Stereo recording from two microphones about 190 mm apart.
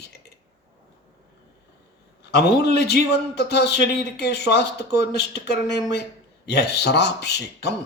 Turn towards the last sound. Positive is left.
turn(degrees=60)  # may be behind; listen again after turning